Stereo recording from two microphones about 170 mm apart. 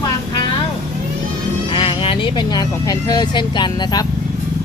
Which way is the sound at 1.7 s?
30° left (ahead or behind).